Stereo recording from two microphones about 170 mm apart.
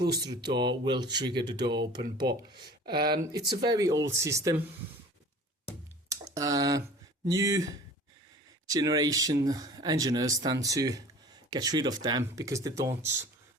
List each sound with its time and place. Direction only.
0.5 s speech: 25° right (ahead or behind)
2.0 s speech: 70° right (ahead or behind)
3.5 s speech: 25° right (ahead or behind)
6.1 s a sound: 20° right (ahead or behind)
7.3 s speech: 20° right (ahead or behind)